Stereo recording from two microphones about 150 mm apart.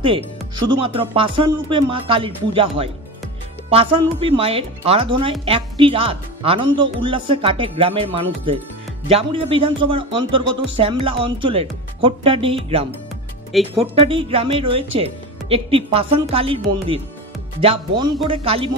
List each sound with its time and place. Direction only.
0.7 s speech: 35° right (ahead or behind)
13.5 s speech: centre (ahead or behind)
13.9 s speech: 40° right (ahead or behind)